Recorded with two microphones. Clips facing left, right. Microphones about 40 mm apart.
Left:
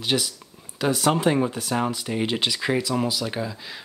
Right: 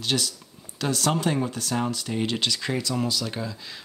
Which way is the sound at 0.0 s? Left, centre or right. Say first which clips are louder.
Left 2 dB; centre.